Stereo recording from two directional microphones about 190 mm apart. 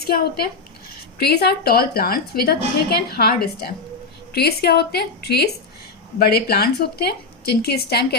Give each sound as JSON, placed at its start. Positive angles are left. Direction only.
{"t": 1.2, "sound": "a woman's voice", "side_deg": 60}